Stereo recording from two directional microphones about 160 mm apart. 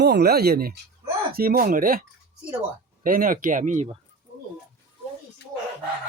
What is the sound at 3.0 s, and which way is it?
Speech, 60° right (ahead or behind).